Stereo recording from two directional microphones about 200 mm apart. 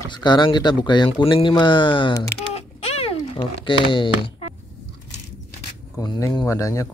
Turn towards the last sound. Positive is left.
turn(degrees=15)  # may be behind; listen again after turning